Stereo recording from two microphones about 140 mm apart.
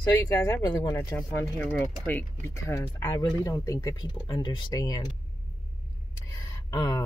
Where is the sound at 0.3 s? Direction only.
25° left (ahead or behind).